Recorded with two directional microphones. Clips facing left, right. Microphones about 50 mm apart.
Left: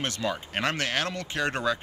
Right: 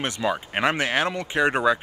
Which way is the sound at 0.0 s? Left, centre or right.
Centre.